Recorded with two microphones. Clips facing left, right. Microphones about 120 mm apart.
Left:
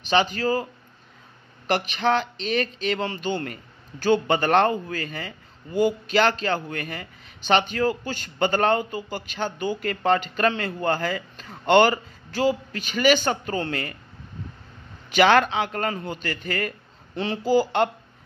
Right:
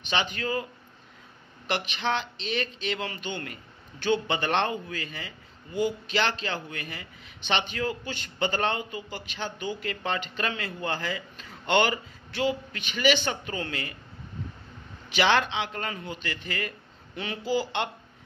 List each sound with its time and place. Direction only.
0.0 s speech: 40° left (ahead or behind)
1.7 s a man's voice: 45° left (ahead or behind)
15.0 s a man's voice: 50° left (ahead or behind)
17.1 s speech: 35° left (ahead or behind)